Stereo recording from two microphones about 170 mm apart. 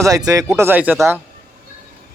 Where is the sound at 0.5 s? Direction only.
10° right (ahead or behind).